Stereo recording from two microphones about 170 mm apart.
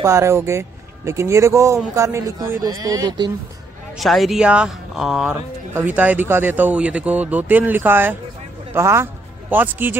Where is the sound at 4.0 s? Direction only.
Centre (ahead or behind).